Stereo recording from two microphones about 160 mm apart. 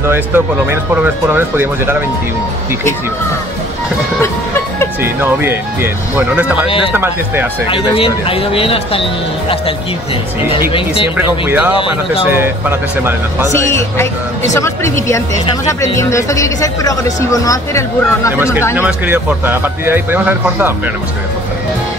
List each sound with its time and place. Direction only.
0.1 s a man's voice: 15° right (ahead or behind)
5.0 s a man's voice: 15° right (ahead or behind)
7.7 s speech: 35° left (ahead or behind)
11.1 s a man's voice: 10° right (ahead or behind)
11.7 s speech: 30° left (ahead or behind)
12.4 s a man's voice: 15° right (ahead or behind)
13.5 s speech: 15° left (ahead or behind)
18.8 s a man's voice: 10° right (ahead or behind)